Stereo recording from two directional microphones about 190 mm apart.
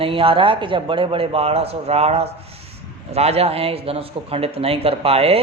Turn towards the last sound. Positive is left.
turn(degrees=-30)  # may be behind; listen again after turning